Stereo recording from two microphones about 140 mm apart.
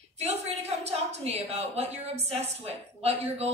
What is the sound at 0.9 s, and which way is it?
A woman's voice, 50° right (ahead or behind).